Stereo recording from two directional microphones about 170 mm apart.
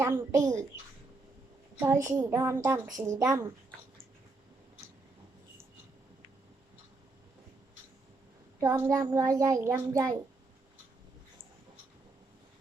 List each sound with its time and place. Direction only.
0.0 s a woman's voice: 15° right (ahead or behind)
1.8 s a woman's voice: 15° right (ahead or behind)
8.6 s a child's voice: 15° right (ahead or behind)